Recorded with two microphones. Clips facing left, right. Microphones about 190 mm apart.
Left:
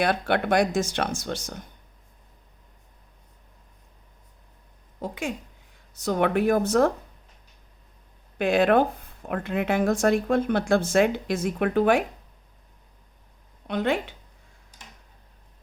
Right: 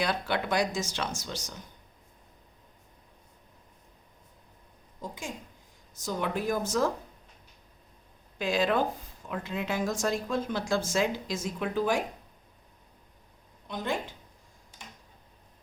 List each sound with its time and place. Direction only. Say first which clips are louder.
0.0 s speech: left 6 dB; 60° left (ahead or behind)
4.9 s a woman's voice: left 8 dB; 65° left (ahead or behind)
8.4 s speech: left 7 dB; 60° left (ahead or behind)
13.7 s speech: left 7 dB; 65° left (ahead or behind)